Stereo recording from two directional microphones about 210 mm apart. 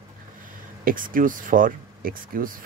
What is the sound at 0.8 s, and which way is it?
Speech, 40° right (ahead or behind).